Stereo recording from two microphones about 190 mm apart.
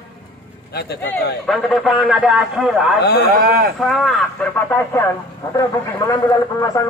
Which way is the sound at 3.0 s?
60° left (ahead or behind).